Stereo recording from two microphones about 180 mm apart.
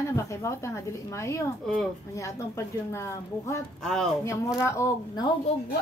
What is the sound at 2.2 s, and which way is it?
A woman's voice, 15° left (ahead or behind).